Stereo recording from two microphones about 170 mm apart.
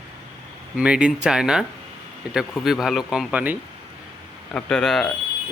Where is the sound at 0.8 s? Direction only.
5° right (ahead or behind).